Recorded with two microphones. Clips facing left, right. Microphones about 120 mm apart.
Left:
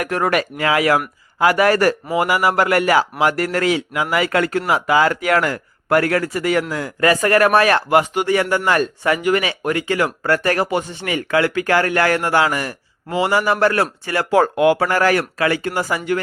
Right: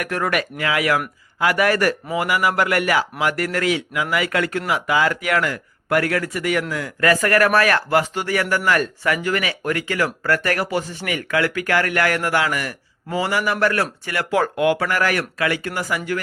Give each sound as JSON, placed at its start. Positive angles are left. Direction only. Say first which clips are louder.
{"t": 0.0, "sound": "a man's voice", "louder": "left 4 dB", "side_deg": 30}